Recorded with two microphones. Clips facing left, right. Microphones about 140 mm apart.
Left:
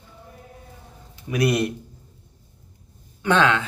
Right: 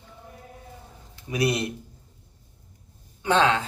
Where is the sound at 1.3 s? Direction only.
25° right (ahead or behind).